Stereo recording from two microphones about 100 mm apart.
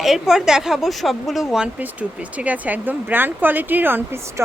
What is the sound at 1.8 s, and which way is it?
Speech, 15° right (ahead or behind).